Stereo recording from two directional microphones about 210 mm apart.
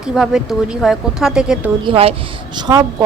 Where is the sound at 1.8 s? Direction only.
25° right (ahead or behind).